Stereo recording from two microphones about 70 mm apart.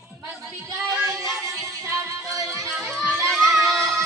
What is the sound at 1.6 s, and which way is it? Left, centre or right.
Music, right.